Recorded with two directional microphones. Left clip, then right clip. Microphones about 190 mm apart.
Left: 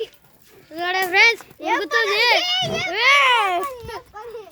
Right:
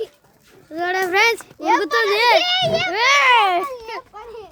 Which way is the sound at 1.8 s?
45° right (ahead or behind).